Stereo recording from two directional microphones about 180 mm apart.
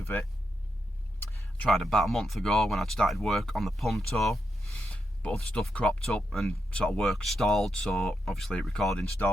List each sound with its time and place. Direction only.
0.0 s speech: 15° left (ahead or behind)